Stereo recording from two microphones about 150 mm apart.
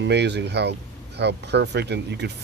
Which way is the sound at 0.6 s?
90° right.